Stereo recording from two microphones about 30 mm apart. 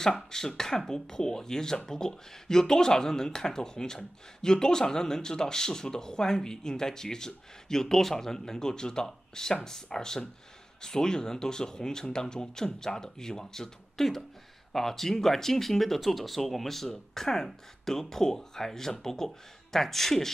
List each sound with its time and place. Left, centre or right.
0.3 s speech: centre